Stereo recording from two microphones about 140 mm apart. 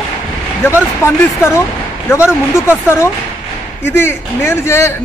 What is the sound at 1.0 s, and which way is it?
Speech, 20° left (ahead or behind).